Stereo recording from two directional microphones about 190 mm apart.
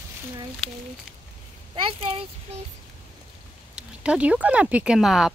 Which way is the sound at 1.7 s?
25° right (ahead or behind).